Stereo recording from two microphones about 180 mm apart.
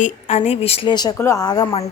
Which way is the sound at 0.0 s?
40° left (ahead or behind).